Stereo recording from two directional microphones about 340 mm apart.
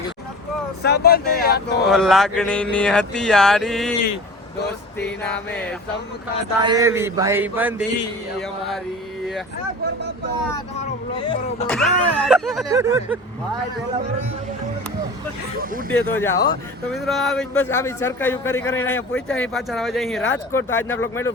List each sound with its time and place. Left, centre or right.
0.8 s male singing: left
1.8 s a man's voice: centre
4.6 s male singing: left
6.6 s speech: centre
11.7 s a man's voice: centre
16.0 s a man's voice: centre